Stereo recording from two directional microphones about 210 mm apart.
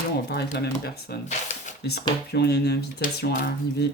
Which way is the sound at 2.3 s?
50° left (ahead or behind).